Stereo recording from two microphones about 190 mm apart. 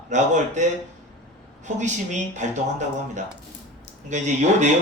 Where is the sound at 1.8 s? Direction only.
40° right (ahead or behind).